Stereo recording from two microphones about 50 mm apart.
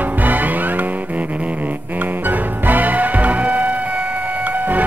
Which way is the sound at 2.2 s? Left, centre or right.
Right.